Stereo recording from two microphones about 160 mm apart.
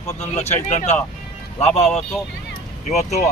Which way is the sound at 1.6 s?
40° left (ahead or behind).